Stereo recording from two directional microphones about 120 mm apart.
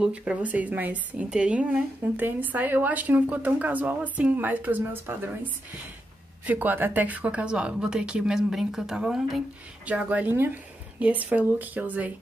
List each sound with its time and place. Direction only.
0.0 s a woman's voice: 10° right (ahead or behind)
6.4 s a woman's voice: 15° right (ahead or behind)